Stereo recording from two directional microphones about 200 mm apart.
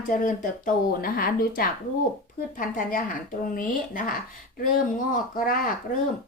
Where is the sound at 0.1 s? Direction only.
45° left (ahead or behind).